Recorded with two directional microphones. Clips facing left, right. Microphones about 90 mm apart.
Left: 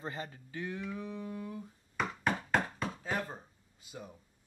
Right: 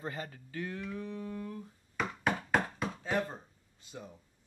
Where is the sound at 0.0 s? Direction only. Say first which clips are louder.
Right 1 dB; 25° left (ahead or behind); by 3.3 s 5° left (ahead or behind).